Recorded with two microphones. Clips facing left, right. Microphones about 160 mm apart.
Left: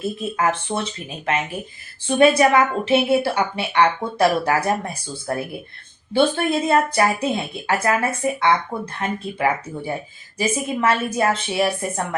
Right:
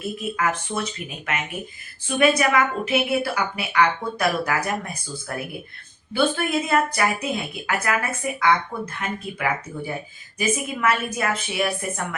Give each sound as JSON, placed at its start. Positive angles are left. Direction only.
{"t": 0.0, "sound": "speech", "side_deg": 30}